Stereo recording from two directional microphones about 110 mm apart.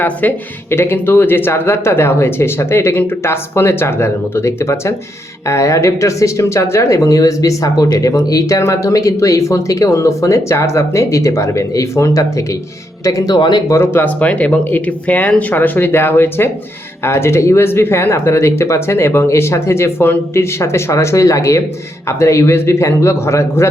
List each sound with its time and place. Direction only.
0.0 s speech: 15° left (ahead or behind); by 13.7 s 40° left (ahead or behind)
13.7 s speech: 20° left (ahead or behind)